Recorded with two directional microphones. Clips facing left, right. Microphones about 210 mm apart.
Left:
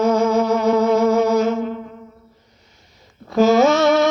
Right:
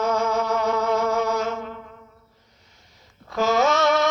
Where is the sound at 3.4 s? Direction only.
5° left (ahead or behind).